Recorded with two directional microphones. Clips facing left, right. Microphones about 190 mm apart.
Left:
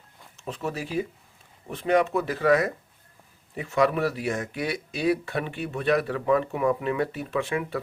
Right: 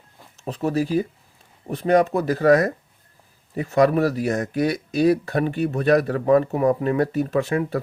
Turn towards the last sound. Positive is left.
turn(degrees=-40)  # may be behind; listen again after turning